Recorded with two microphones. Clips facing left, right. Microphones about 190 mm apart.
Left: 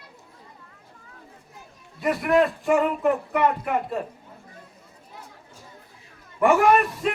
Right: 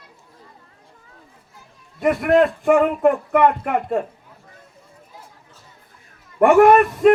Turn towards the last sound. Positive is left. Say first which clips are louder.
# right 8 dB
turn(degrees=-55)  # may be behind; listen again after turning